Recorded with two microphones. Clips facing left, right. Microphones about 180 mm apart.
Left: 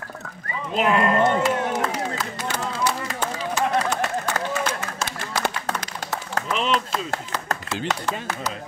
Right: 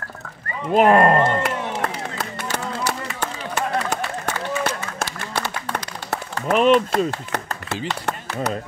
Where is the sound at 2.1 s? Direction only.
60° right (ahead or behind).